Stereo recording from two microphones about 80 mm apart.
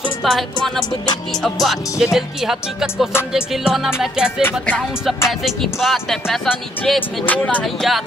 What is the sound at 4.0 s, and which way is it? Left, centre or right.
Music, centre.